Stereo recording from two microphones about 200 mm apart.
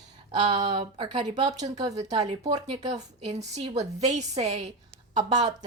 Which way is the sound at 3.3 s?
35° right (ahead or behind).